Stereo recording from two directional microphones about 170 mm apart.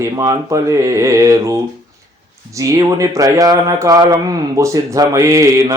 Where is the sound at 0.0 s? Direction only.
20° right (ahead or behind).